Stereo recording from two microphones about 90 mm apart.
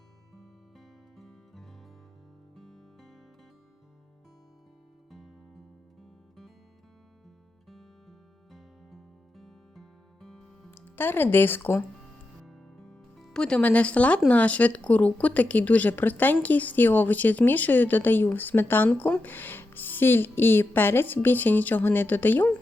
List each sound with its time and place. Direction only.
1.1 s music: centre (ahead or behind)
8.5 s music: 5° left (ahead or behind)
10.7 s speech: 25° left (ahead or behind)
12.4 s music: 5° left (ahead or behind)
14.3 s a woman's voice: 15° left (ahead or behind)